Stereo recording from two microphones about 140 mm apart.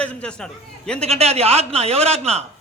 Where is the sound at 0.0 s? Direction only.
10° left (ahead or behind).